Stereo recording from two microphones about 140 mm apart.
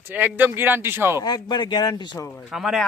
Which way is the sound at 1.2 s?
30° left (ahead or behind).